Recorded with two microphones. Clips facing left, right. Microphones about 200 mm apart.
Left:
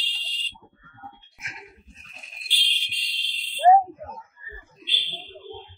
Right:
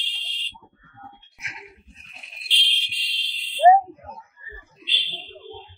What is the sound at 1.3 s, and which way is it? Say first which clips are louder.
Fire alarm: right 1 dB; 45° left (ahead or behind).